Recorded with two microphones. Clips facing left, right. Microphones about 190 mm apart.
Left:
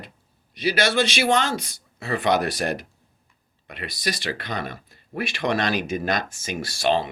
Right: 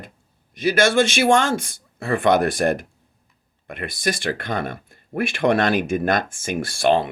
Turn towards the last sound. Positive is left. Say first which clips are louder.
# right 4 dB
turn(degrees=-55)  # may be behind; listen again after turning